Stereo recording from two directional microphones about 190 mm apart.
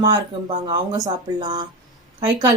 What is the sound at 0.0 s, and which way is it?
A woman's voice, 20° right (ahead or behind).